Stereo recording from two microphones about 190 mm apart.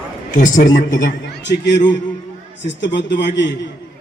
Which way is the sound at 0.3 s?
40° left (ahead or behind).